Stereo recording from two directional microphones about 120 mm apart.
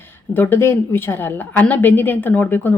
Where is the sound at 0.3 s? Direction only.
20° left (ahead or behind).